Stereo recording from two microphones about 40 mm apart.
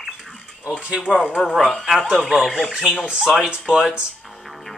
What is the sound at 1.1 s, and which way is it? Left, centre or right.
Speech, left.